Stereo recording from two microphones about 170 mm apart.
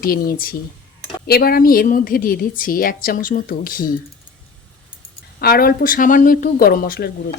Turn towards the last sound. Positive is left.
turn(degrees=60)  # may be behind; listen again after turning